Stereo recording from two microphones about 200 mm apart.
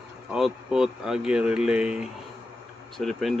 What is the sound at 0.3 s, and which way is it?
Speech, 5° right (ahead or behind).